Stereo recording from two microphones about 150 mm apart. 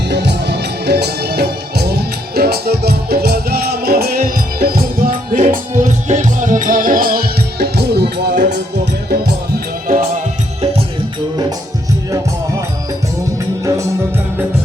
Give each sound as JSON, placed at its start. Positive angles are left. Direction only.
{"t": 0.1, "sound": "music", "side_deg": -90}
{"t": 9.8, "sound": "music", "side_deg": -70}